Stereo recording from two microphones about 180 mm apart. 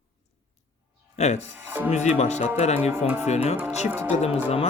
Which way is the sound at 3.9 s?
10° right (ahead or behind).